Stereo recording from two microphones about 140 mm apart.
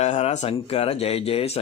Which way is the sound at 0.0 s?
50° left (ahead or behind).